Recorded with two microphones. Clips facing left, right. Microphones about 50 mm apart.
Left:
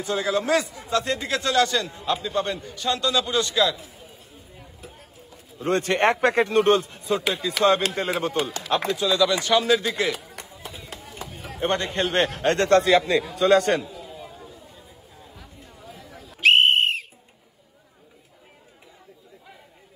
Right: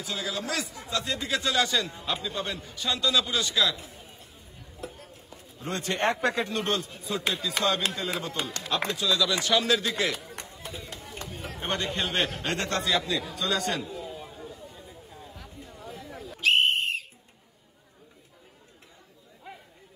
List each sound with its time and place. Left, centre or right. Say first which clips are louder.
0.0 s speech: left 9 dB; left
1.1 s speech: left 3 dB; left
1.4 s a man's voice: left 5 dB; centre
4.8 s a sound: right 5 dB; centre
5.6 s speech: left 8 dB; left
8.7 s speech: left 5 dB; left
9.1 s speech: left 5 dB; centre
10.2 s a sound: left 1 dB; centre
12.1 s a man's voice: left 6 dB; centre
12.4 s speech: left 10 dB; left
13.8 s a sound: right 1 dB; centre
15.3 s chatter: right 1 dB; centre
16.3 s whistle: left 6 dB; left